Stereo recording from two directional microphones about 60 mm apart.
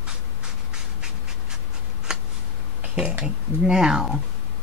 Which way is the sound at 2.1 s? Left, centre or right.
Centre.